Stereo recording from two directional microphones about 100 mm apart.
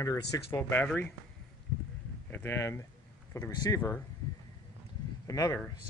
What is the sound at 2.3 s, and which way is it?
Speech, 25° left (ahead or behind).